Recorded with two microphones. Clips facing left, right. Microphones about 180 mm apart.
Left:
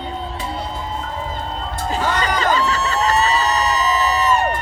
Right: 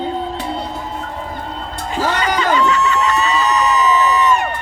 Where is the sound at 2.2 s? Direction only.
35° left (ahead or behind).